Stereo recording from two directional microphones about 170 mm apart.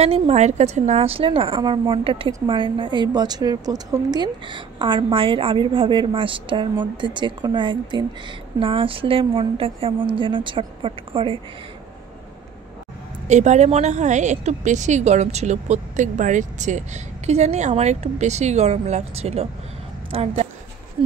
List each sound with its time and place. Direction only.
0.0 s a woman's voice: 35° right (ahead or behind)
13.3 s a woman's voice: 45° right (ahead or behind)